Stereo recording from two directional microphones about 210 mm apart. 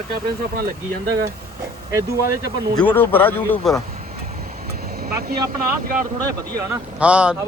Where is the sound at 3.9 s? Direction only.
40° right (ahead or behind).